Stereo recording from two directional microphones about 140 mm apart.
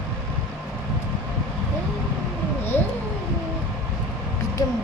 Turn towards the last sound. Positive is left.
turn(degrees=25)  # may be behind; listen again after turning